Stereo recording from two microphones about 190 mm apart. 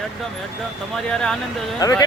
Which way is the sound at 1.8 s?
20° left (ahead or behind).